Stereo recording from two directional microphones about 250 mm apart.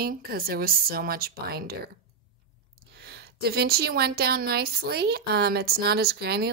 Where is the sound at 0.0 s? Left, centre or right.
Right.